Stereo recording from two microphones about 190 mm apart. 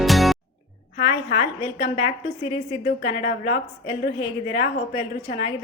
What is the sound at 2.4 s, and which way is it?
A woman's voice, 30° left (ahead or behind).